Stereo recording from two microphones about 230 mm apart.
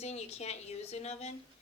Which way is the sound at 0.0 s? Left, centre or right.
Left.